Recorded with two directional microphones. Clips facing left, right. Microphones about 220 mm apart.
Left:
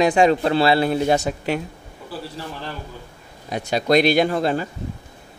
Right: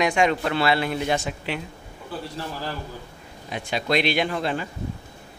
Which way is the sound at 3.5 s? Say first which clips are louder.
Left 6 dB; 40° left (ahead or behind).